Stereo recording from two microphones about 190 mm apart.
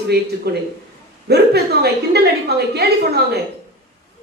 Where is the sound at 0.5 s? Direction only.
60° right (ahead or behind).